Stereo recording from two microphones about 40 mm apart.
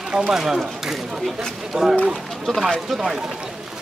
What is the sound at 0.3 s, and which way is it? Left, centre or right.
Speech, centre.